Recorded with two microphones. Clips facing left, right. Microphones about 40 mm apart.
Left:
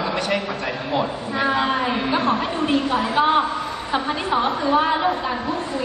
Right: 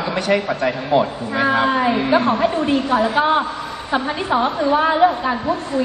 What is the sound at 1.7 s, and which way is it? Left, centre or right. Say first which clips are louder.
A woman's voice: right 5 dB; right.